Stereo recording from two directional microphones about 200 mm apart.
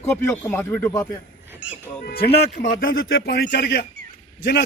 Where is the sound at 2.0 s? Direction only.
50° left (ahead or behind).